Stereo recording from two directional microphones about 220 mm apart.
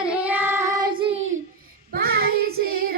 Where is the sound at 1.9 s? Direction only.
45° right (ahead or behind).